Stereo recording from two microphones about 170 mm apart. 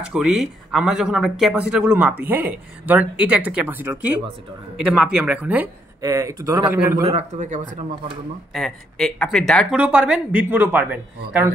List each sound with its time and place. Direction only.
0.0 s speech: 5° right (ahead or behind)
5.9 s speech: 20° right (ahead or behind)
7.1 s speech: 40° right (ahead or behind)
8.5 s speech: centre (ahead or behind)